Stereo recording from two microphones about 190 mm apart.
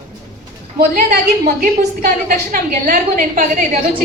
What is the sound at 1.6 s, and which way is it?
A woman's voice, 50° right (ahead or behind).